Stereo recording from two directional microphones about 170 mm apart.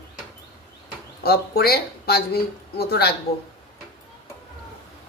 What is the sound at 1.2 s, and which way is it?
Speech, 65° left (ahead or behind).